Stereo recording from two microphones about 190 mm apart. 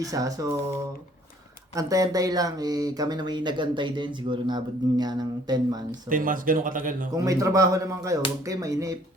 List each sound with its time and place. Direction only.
0.0 s speech: 20° right (ahead or behind)
1.7 s speech: 20° right (ahead or behind)
6.1 s speech: 45° right (ahead or behind)
7.1 s speech: 20° right (ahead or behind)